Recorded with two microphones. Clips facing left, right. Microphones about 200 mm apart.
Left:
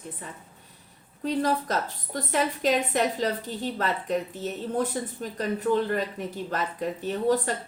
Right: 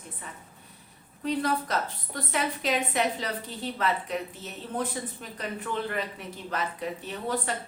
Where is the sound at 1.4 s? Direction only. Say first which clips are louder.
Left 2 dB; 40° left (ahead or behind).